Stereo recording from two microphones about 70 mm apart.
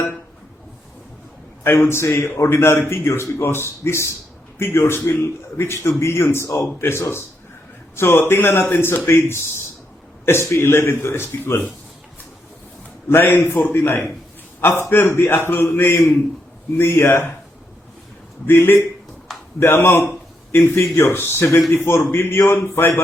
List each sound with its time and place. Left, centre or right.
1.6 s a man's voice: left
13.1 s a man's voice: left
18.4 s a man's voice: left